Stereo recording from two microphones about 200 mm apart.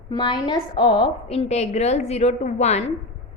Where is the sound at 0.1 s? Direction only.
25° left (ahead or behind).